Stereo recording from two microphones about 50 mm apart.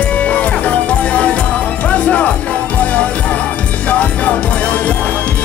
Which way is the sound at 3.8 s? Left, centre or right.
Left.